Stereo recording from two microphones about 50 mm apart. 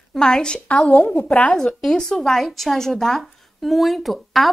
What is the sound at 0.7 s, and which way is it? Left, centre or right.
A woman's voice, left.